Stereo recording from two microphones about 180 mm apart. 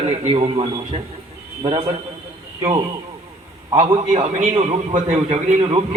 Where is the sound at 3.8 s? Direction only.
40° right (ahead or behind).